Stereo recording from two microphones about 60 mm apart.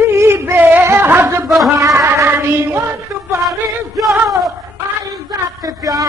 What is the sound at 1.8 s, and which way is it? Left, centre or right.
Music, right.